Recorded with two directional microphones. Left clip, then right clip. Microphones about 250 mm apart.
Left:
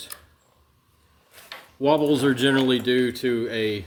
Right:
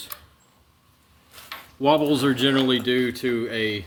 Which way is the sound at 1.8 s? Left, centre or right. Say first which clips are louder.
Even; centre.